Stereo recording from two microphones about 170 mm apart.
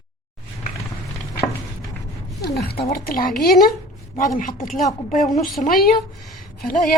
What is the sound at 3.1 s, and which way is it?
A woman's voice, 60° left (ahead or behind).